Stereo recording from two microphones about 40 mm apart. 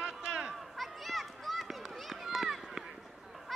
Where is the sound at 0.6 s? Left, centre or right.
Centre.